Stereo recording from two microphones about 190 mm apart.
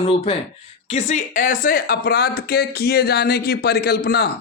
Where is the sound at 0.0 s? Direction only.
30° left (ahead or behind).